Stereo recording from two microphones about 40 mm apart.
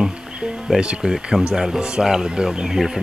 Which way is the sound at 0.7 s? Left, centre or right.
Centre.